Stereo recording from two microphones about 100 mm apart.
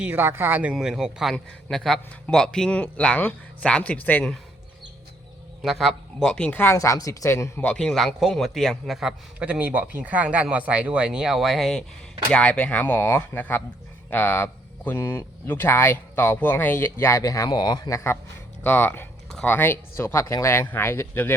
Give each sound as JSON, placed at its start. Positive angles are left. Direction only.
{"t": 0.0, "sound": "speech", "side_deg": -20}
{"t": 0.7, "sound": "a man's voice", "side_deg": -5}
{"t": 5.6, "sound": "speech", "side_deg": 0}
{"t": 6.7, "sound": "speech", "side_deg": 35}
{"t": 7.6, "sound": "a man's voice", "side_deg": 10}
{"t": 18.6, "sound": "speech", "side_deg": 20}